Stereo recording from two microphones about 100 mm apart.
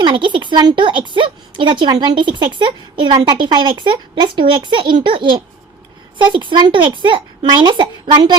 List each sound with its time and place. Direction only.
0.0 s a woman's voice: 50° right (ahead or behind)
6.3 s a woman's voice: 55° right (ahead or behind)